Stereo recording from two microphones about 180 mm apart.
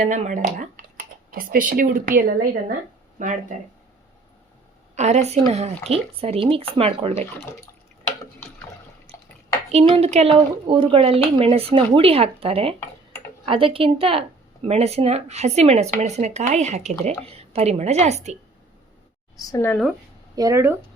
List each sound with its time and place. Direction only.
0.0 s speech: 40° right (ahead or behind)
4.9 s speech: 40° right (ahead or behind)
8.4 s water: 10° left (ahead or behind)
9.1 s dishes: 30° right (ahead or behind)
9.7 s speech: 35° right (ahead or behind)
19.4 s speech: 20° left (ahead or behind)
20.3 s speech: 20° right (ahead or behind)